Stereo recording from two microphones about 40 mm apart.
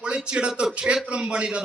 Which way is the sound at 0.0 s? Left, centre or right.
Right.